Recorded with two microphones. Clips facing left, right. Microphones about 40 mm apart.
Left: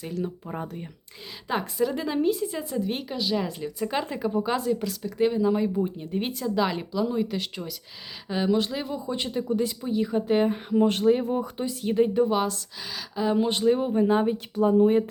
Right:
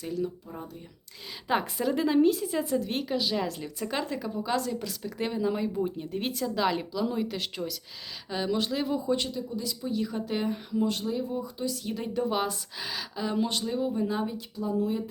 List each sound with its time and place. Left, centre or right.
0.4 s speech: left
1.5 s speech: centre
4.9 s speech: centre
9.8 s speech: left
11.6 s speech: left
12.2 s speech: centre
13.1 s speech: centre; by 15.1 s left